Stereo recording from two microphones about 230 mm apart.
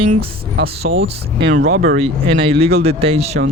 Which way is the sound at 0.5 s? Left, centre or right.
Right.